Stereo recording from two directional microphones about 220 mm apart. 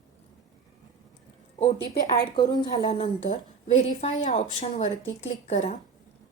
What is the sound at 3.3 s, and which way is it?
A woman's voice, 35° left (ahead or behind).